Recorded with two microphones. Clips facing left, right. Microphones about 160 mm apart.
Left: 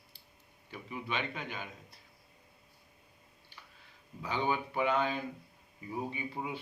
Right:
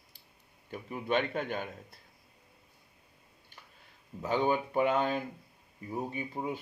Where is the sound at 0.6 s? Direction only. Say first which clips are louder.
Right 6 dB; 50° right (ahead or behind).